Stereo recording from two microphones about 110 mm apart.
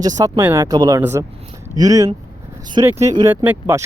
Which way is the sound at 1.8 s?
30° right (ahead or behind).